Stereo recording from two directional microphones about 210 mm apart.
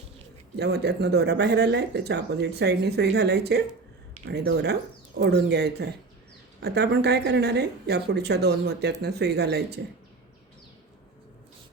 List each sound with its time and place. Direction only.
0.5 s speech: 50° right (ahead or behind)